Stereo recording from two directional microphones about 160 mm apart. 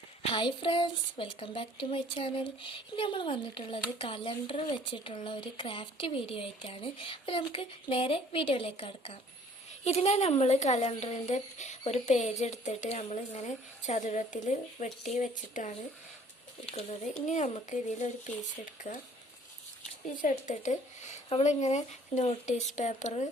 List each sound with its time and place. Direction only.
0.2 s speech: 35° left (ahead or behind); by 15.7 s 50° left (ahead or behind)
16.7 s speech: 45° left (ahead or behind)
21.2 s speech: 40° left (ahead or behind)